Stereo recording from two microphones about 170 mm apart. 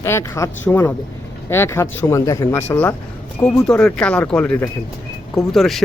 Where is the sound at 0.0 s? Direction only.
15° left (ahead or behind).